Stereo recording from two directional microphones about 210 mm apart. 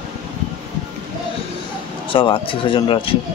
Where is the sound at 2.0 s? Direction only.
25° left (ahead or behind).